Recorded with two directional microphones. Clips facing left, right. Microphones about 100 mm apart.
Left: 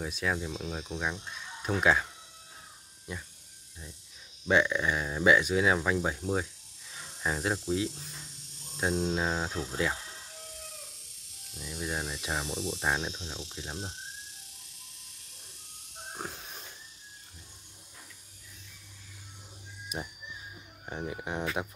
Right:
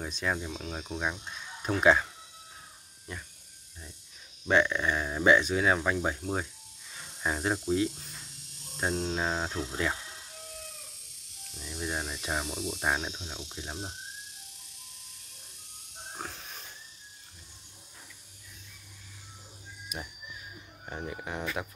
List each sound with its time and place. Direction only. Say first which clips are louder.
0.0 s speech: even; centre (ahead or behind)
4.5 s speech: even; 5° left (ahead or behind)
11.5 s speech: even; 5° left (ahead or behind)
19.9 s speech: left 3 dB; 30° left (ahead or behind)
20.8 s speech: left 1 dB; 10° left (ahead or behind)